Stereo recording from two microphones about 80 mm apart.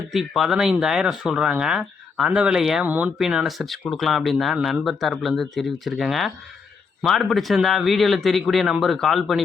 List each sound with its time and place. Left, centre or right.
0.1 s speech: centre
2.8 s speech: right
3.2 s speech: centre